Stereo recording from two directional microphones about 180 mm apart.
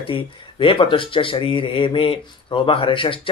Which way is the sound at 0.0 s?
30° left (ahead or behind).